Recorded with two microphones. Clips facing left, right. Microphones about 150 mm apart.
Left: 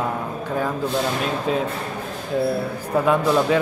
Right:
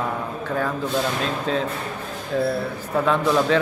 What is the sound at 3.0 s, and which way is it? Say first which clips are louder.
Speech: left 1 dB; 10° left (ahead or behind).